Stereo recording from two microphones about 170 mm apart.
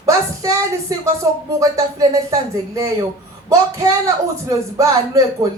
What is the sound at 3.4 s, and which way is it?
Speech, 20° right (ahead or behind).